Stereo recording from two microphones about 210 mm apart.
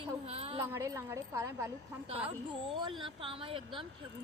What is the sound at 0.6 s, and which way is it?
A woman's voice, 15° right (ahead or behind).